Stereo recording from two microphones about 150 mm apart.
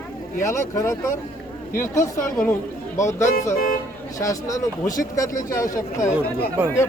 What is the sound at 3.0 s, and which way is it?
Speech, 20° left (ahead or behind).